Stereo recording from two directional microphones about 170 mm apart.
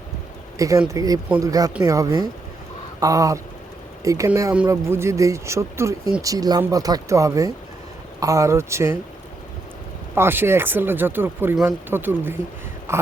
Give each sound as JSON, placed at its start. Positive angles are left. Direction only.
{"t": 0.9, "sound": "speech", "side_deg": -20}
{"t": 10.2, "sound": "speech", "side_deg": -15}
{"t": 12.9, "sound": "a sound", "side_deg": -15}